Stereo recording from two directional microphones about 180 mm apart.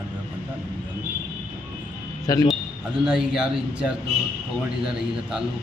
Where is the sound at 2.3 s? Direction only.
20° left (ahead or behind).